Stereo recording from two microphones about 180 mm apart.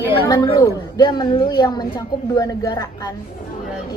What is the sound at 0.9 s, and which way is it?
A woman's voice, 25° left (ahead or behind).